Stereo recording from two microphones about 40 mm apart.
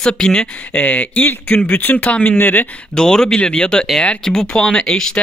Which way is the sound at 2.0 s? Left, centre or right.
Left.